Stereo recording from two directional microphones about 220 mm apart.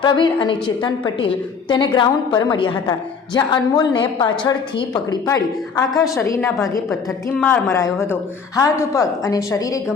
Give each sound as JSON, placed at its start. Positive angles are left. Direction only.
{"t": 0.0, "sound": "a woman's voice", "side_deg": 20}